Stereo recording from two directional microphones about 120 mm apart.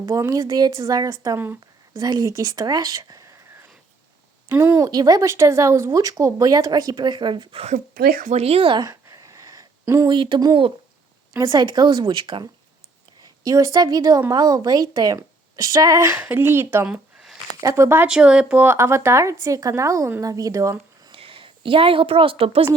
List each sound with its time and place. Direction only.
0.0 s speech: 25° right (ahead or behind)
4.4 s speech: 20° right (ahead or behind); by 7.6 s 40° right (ahead or behind)
8.3 s speech: 60° right (ahead or behind)
8.8 s a sound: 30° right (ahead or behind)
10.1 s speech: 40° right (ahead or behind)
13.4 s speech: 25° right (ahead or behind)
16.8 s a sound: 5° right (ahead or behind)
17.6 s speech: 25° right (ahead or behind)
18.1 s speech: 5° right (ahead or behind); by 20.7 s 25° right (ahead or behind)
21.1 s a woman's voice: 50° right (ahead or behind)